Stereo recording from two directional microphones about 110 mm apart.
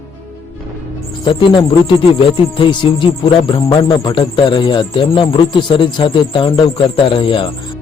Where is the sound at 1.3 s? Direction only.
50° left (ahead or behind).